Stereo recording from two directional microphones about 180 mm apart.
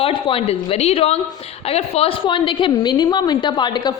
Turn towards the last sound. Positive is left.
turn(degrees=25)  # may be behind; listen again after turning